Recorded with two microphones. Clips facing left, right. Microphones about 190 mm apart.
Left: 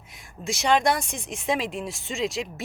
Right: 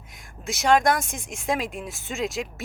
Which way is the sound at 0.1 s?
Centre (ahead or behind).